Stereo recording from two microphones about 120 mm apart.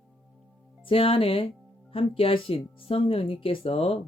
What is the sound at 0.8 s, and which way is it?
Speech, 50° left (ahead or behind).